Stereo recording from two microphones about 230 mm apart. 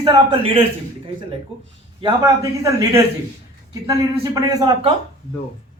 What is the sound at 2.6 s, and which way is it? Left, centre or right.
A man's voice, centre.